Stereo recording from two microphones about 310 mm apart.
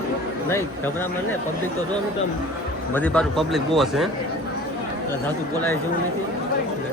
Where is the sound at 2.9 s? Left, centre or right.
Centre.